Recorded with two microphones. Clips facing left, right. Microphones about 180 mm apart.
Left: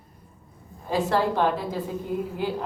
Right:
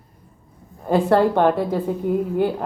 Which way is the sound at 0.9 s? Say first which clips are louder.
Right 7 dB; 55° right (ahead or behind).